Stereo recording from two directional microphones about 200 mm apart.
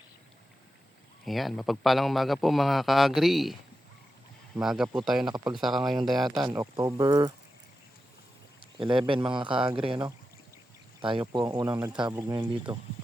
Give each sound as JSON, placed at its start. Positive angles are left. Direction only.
{"t": 1.2, "sound": "a man's voice", "side_deg": 0}
{"t": 6.6, "sound": "speech", "side_deg": -15}
{"t": 8.8, "sound": "speech", "side_deg": -25}